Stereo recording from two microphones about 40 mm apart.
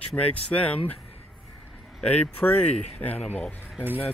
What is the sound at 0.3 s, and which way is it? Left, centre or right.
Speech, left.